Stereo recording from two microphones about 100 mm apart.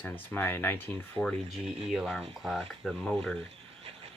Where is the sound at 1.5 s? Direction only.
5° right (ahead or behind).